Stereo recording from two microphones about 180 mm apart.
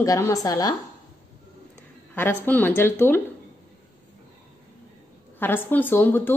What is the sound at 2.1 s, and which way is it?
Speech, 10° left (ahead or behind).